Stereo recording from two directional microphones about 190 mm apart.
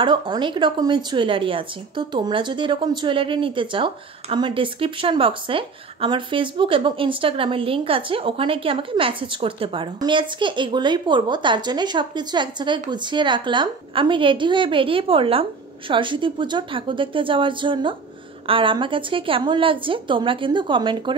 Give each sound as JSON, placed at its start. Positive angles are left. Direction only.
{"t": 0.0, "sound": "a woman's voice", "side_deg": -25}